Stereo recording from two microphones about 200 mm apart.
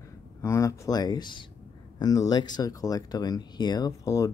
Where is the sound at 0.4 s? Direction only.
15° left (ahead or behind).